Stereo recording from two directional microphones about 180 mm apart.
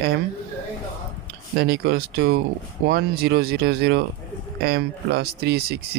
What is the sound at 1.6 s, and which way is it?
Speech, 60° right (ahead or behind).